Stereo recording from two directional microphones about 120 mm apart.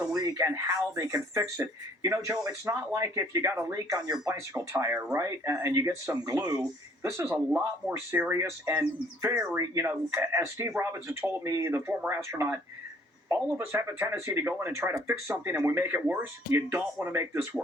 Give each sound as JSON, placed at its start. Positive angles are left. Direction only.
{"t": 0.0, "sound": "speech", "side_deg": -25}
{"t": 4.7, "sound": "speech", "side_deg": -20}